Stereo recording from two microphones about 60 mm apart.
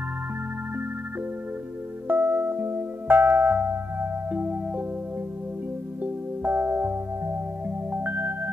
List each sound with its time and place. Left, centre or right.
2.0 s music: right
6.0 s music: right